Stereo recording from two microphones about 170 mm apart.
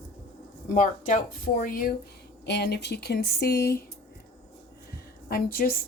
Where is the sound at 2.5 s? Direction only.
75° left (ahead or behind).